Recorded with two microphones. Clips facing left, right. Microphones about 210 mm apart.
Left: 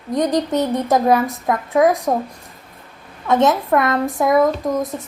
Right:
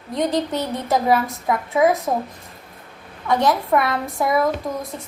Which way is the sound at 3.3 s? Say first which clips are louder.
Left 3 dB; 20° left (ahead or behind).